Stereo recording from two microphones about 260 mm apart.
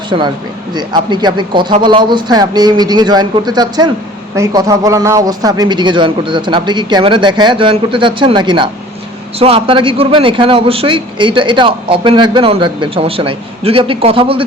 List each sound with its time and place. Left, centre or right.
0.1 s a man's voice: centre